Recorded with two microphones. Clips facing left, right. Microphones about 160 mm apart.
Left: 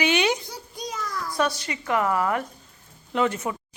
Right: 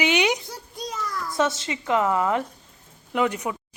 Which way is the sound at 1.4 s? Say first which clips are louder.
Right 2 dB; 25° right (ahead or behind).